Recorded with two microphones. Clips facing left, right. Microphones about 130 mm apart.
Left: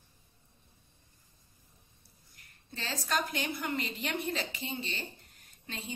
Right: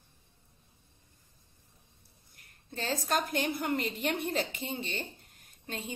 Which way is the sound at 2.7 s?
50° right (ahead or behind).